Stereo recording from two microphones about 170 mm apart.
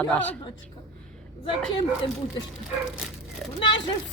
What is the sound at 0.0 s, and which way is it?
Speech, 10° left (ahead or behind).